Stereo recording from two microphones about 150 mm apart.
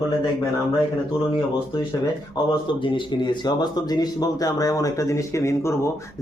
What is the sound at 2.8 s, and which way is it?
Speech, 30° left (ahead or behind).